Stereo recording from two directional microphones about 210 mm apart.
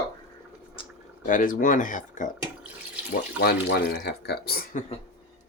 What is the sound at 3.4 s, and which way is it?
Speech, 50° left (ahead or behind).